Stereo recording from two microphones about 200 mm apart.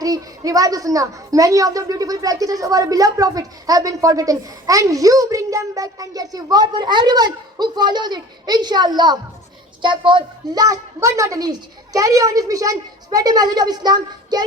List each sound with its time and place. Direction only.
0.0 s a woman's voice: 15° right (ahead or behind)